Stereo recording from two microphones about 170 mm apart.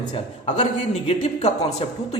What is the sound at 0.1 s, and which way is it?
A man's voice, 40° left (ahead or behind).